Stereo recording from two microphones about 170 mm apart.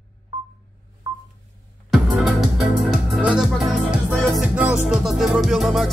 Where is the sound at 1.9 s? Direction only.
Centre (ahead or behind).